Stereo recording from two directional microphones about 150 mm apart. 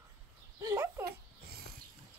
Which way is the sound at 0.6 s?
20° right (ahead or behind).